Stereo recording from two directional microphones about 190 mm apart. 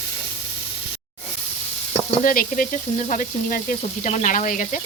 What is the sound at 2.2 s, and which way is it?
Sizzle, 45° left (ahead or behind).